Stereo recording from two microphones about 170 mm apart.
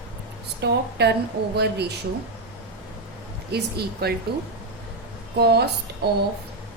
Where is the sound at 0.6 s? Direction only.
80° right.